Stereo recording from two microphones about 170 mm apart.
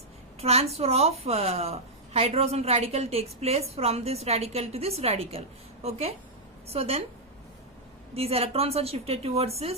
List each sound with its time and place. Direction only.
0.4 s a woman's voice: 35° right (ahead or behind)
8.1 s a woman's voice: 35° right (ahead or behind)